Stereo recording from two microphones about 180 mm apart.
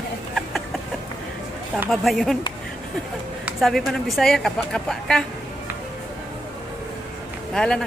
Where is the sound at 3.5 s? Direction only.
Centre (ahead or behind).